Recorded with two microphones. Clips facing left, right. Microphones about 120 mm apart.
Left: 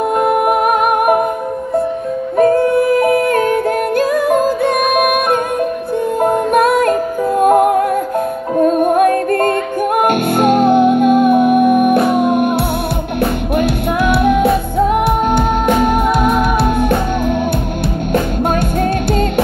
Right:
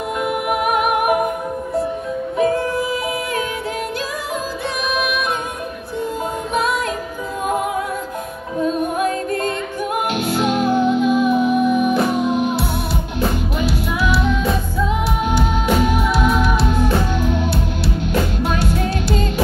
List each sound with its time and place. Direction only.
0.2 s music: 45° left (ahead or behind)
2.3 s yodeling: 50° left (ahead or behind)
4.9 s music: 55° left (ahead or behind)
18.1 s music: 55° left (ahead or behind)